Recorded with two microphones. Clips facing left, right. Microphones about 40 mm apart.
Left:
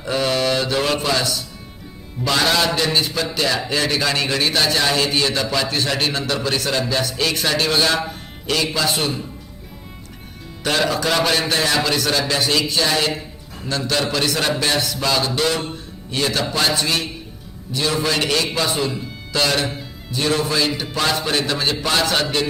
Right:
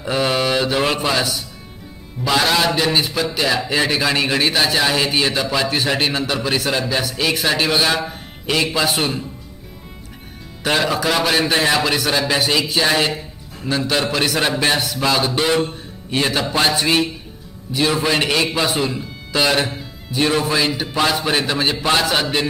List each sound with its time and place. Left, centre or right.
0.0 s mantra: centre
1.0 s a man's voice: centre
8.4 s a man's voice: centre
10.6 s a man's voice: centre
19.7 s music: centre
20.1 s a man's voice: centre